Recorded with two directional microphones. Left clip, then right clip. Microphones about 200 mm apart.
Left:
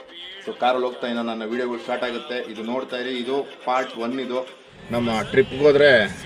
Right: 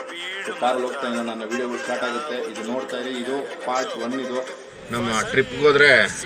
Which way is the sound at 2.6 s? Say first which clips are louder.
Even; 5° left (ahead or behind).